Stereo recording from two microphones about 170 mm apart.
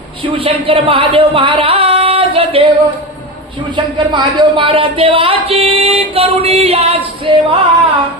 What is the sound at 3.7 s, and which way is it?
A man's voice, 25° right (ahead or behind).